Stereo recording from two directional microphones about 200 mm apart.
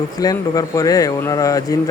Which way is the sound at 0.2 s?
20° left (ahead or behind).